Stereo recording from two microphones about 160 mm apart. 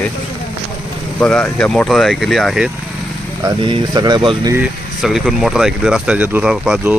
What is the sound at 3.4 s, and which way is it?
Speech, 25° right (ahead or behind).